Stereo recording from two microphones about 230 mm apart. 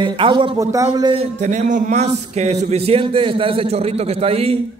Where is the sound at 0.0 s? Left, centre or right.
Right.